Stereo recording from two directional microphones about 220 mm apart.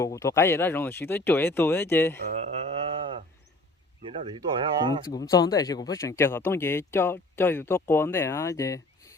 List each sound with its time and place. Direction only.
0.0 s speech: 15° left (ahead or behind)
2.3 s mantra: 30° right (ahead or behind)
4.0 s speech: 25° right (ahead or behind)
4.9 s speech: 15° left (ahead or behind)